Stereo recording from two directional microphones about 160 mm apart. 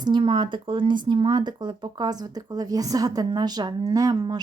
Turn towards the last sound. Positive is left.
turn(degrees=-25)  # may be behind; listen again after turning